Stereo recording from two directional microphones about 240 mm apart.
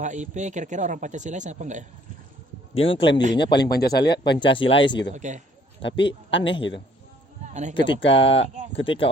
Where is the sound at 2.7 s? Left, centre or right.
Left.